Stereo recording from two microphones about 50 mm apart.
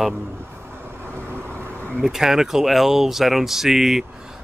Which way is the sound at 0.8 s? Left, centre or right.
Right.